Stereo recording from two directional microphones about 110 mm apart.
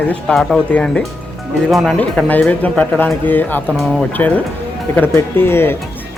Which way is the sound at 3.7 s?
Centre (ahead or behind).